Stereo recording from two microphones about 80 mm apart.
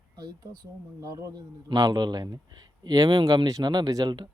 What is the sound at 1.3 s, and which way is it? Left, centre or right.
A man's voice, right.